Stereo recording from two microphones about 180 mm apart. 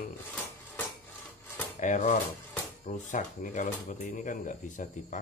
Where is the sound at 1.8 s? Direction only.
45° left (ahead or behind).